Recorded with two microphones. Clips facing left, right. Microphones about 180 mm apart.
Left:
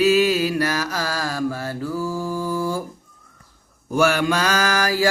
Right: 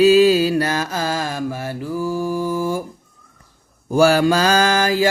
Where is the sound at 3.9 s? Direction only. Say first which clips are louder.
Right 5 dB; 30° right (ahead or behind).